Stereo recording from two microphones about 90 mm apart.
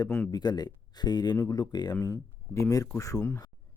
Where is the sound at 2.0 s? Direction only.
40° left (ahead or behind).